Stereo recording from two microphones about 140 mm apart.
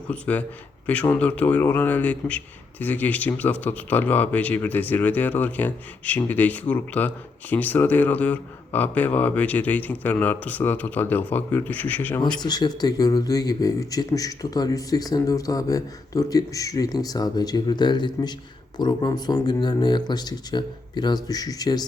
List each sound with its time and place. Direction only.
0.1 s a man's voice: 10° left (ahead or behind)
12.4 s speech: 30° left (ahead or behind)